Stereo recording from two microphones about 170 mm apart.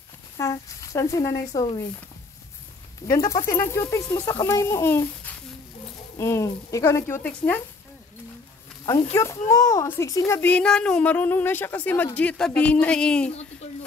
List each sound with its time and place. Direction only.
0.4 s speech: 20° left (ahead or behind)
3.0 s speech: 20° left (ahead or behind)
9.1 s speech: 15° left (ahead or behind)